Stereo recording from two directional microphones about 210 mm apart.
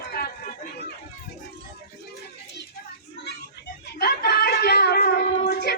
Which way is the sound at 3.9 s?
50° left (ahead or behind).